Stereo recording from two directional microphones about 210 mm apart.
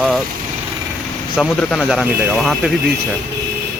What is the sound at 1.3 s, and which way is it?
A man's voice, centre (ahead or behind).